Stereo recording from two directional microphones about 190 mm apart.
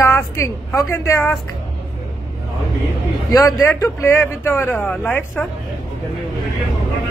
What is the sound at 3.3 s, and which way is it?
Speech, 15° left (ahead or behind).